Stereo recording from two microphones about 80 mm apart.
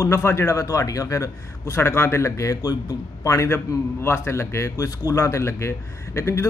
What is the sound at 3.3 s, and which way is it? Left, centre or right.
A man's voice, left.